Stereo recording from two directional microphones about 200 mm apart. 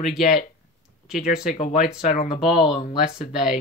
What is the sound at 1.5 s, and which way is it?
Speech, 35° left (ahead or behind).